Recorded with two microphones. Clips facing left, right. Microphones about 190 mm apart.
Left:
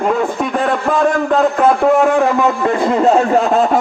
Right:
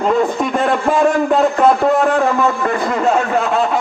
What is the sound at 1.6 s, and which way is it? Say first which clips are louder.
A man's voice: left 3 dB; 5° left (ahead or behind).